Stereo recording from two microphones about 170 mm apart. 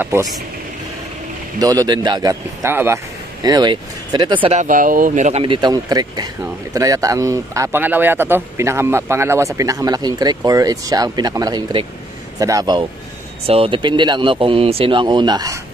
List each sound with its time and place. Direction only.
0.0 s speech: 15° right (ahead or behind)
1.6 s speech: 20° right (ahead or behind)
3.4 s speech: 25° right (ahead or behind)
4.6 s speech: 50° right (ahead or behind)
5.4 s speech: 30° right (ahead or behind)
13.5 s speech: 30° right (ahead or behind)